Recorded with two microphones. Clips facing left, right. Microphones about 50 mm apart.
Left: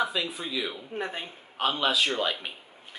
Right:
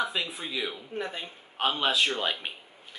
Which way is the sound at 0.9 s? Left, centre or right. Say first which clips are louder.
Left 1 dB; centre.